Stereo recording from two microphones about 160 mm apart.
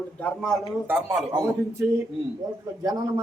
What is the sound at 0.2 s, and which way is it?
Speech, 5° left (ahead or behind).